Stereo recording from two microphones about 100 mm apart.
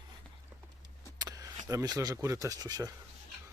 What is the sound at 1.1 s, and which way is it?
Vehicle, 40° right (ahead or behind).